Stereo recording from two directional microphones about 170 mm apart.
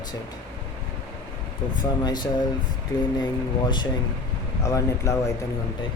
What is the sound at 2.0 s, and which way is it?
Speech, 25° left (ahead or behind).